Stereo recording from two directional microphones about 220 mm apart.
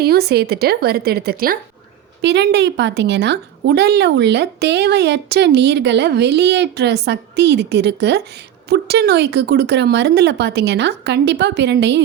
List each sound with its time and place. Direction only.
0.0 s a woman's voice: 45° right (ahead or behind)